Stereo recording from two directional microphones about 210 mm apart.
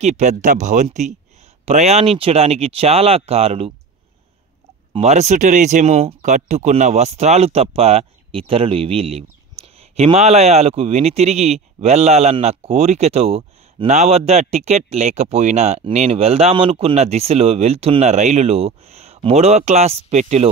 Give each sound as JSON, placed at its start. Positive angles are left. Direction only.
{"t": 0.0, "sound": "speech", "side_deg": -35}
{"t": 4.9, "sound": "speech", "side_deg": -30}